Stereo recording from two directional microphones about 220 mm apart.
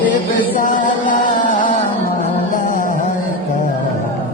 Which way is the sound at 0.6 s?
35° left (ahead or behind).